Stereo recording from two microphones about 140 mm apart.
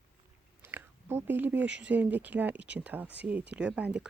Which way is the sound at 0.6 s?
15° right (ahead or behind).